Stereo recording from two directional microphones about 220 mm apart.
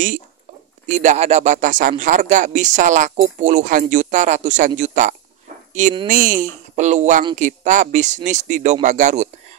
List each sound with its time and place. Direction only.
0.8 s speech: 35° right (ahead or behind)